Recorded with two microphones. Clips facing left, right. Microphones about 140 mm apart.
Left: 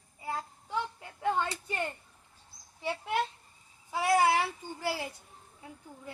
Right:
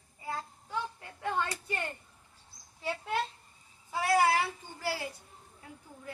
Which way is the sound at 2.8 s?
20° left (ahead or behind).